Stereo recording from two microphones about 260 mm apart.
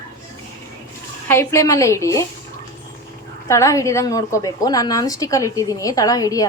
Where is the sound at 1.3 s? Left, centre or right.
Centre.